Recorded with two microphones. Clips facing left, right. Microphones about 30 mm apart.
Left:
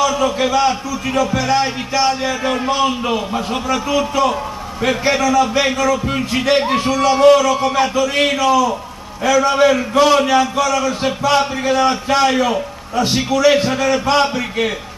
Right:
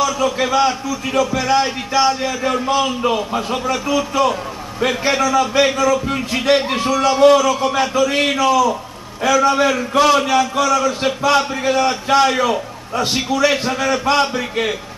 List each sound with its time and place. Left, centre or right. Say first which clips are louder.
0.0 s a man's voice: left 2 dB; centre
2.4 s a man's voice: even; centre
3.0 s a man's voice: right 1 dB; centre
4.8 s a man's voice: left 1 dB; centre
12.4 s a man's voice: left 1 dB; centre
13.5 s a man's voice: left 4 dB; centre